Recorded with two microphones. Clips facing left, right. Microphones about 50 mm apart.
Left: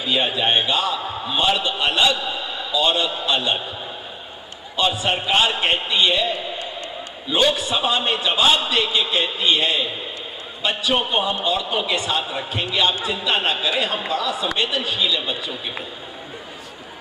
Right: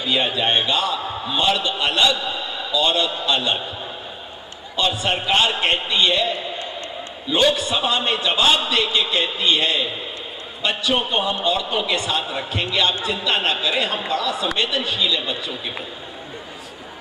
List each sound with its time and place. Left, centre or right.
0.0 s speech: centre
1.0 s a sound: centre
1.3 s speech: centre
2.0 s a man's voice: centre
2.7 s speech: centre
4.7 s speech: centre
7.5 s a man's voice: centre
12.2 s speech: centre